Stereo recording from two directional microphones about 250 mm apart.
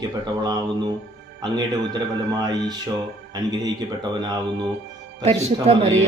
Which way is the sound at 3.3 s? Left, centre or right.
Centre.